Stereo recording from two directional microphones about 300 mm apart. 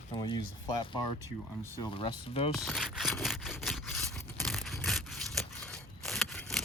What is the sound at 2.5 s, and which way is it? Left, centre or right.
Sawing, centre.